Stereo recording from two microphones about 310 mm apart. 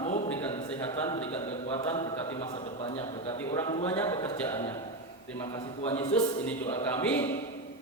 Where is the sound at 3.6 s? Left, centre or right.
Centre.